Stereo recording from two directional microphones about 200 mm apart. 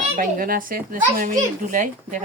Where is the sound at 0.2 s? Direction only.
45° right (ahead or behind).